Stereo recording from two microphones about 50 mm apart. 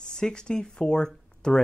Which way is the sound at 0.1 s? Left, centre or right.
Centre.